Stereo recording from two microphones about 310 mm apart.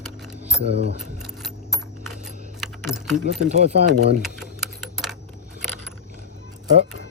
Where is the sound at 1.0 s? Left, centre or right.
Centre.